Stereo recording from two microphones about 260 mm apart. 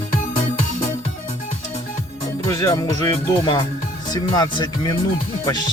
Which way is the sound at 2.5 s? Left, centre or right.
Centre.